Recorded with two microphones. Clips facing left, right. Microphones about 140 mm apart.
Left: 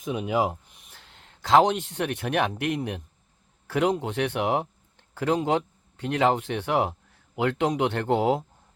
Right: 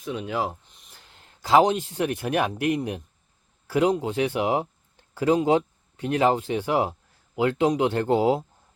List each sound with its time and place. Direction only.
0.0 s speech: 15° left (ahead or behind); by 8.4 s 5° right (ahead or behind)